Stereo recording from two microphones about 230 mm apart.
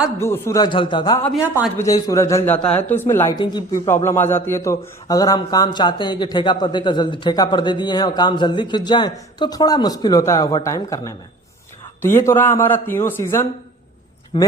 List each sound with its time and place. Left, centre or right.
0.2 s a man's voice: centre
1.4 s speech: centre
1.8 s a man's voice: centre